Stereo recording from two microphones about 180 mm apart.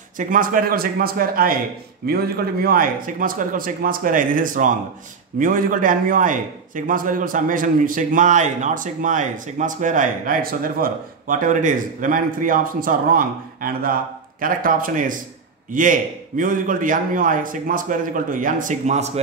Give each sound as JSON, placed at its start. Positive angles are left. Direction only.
{"t": 0.2, "sound": "a man's voice", "side_deg": -50}